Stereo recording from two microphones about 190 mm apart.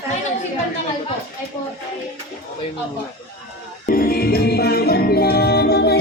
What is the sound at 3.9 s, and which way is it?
Music, 50° left (ahead or behind).